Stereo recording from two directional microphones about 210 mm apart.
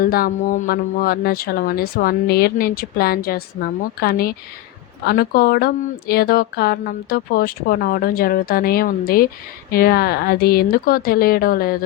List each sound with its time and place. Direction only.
0.0 s speech: 45° left (ahead or behind)